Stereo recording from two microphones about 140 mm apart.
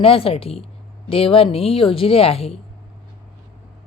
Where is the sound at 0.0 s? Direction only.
40° left (ahead or behind).